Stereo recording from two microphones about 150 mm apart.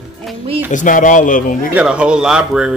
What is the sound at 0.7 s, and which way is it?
Speech, 60° left (ahead or behind).